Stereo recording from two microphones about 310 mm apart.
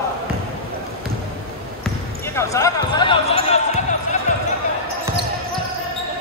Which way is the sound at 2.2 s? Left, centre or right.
Centre.